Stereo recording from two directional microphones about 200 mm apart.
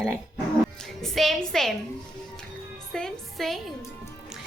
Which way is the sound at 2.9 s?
Centre (ahead or behind).